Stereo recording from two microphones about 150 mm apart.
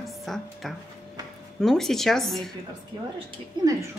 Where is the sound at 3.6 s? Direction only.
30° right (ahead or behind).